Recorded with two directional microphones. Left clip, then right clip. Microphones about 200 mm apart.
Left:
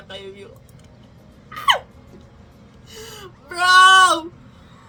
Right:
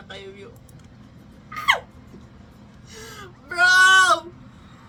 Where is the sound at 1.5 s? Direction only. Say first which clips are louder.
Left 3 dB; 25° left (ahead or behind).